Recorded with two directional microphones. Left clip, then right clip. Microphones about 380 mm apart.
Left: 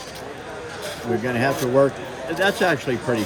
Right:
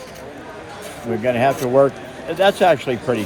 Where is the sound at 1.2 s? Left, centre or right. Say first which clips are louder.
Right 7 dB; centre.